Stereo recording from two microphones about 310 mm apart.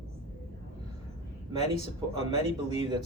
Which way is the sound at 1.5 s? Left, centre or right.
Left.